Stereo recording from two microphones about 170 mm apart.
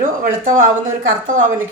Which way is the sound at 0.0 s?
50° right (ahead or behind).